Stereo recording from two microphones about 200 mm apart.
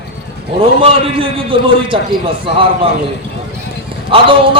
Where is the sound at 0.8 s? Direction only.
25° right (ahead or behind).